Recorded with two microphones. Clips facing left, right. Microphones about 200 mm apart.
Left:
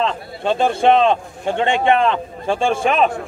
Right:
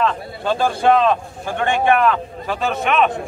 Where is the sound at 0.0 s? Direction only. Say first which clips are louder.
Even; 25° left (ahead or behind).